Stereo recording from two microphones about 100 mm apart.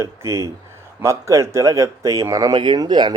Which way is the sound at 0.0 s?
30° right (ahead or behind).